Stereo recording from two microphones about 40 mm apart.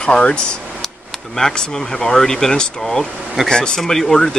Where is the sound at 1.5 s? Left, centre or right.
Centre.